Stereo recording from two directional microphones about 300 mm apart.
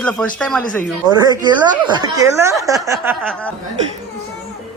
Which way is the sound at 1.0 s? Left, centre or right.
Centre.